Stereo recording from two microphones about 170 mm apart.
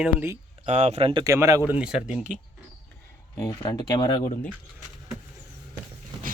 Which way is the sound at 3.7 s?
25° left (ahead or behind).